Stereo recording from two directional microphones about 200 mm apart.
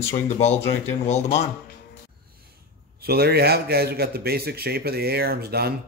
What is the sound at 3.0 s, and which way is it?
A man's voice, 50° right (ahead or behind).